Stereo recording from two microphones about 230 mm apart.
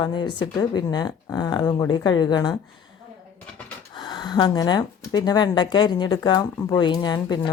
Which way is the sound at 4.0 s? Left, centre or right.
Centre.